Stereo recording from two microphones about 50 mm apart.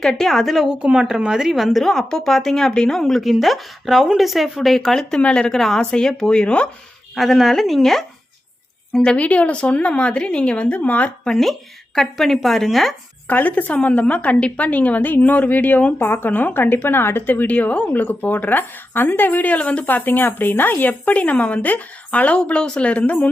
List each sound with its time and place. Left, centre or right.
0.0 s a woman's voice: centre
0.7 s a woman's voice: right; by 4.8 s centre
4.8 s speech: centre
7.2 s a woman's voice: centre
8.9 s a woman's voice: left
11.9 s a woman's voice: centre
13.2 s speech: left
16.0 s a woman's voice: left
16.3 s a woman's voice: left
17.2 s speech: left
19.8 s speech: left